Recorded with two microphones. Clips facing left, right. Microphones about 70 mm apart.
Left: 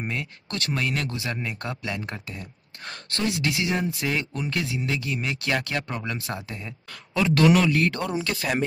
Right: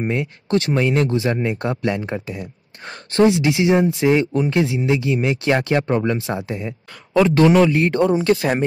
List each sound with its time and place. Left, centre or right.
0.0 s speech: right